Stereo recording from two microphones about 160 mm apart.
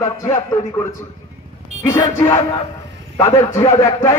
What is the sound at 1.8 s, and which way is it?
A man's voice, 20° left (ahead or behind).